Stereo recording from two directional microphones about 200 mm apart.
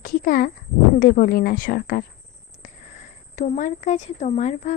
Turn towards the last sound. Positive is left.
turn(degrees=35)  # may be behind; listen again after turning